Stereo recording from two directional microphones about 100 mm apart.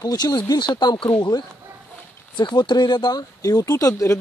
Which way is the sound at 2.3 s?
50° left (ahead or behind).